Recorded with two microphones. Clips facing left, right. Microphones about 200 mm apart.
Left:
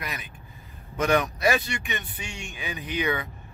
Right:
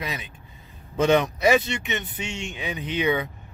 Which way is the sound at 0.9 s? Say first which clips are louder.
Right 4 dB; 25° right (ahead or behind).